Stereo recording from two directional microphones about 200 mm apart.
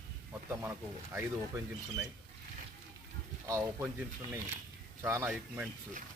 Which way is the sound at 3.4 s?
15° right (ahead or behind).